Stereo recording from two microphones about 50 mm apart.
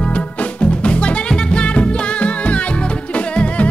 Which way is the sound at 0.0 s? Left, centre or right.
Left.